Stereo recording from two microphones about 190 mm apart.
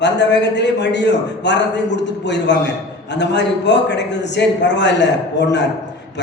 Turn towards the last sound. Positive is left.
turn(degrees=65)  # may be behind; listen again after turning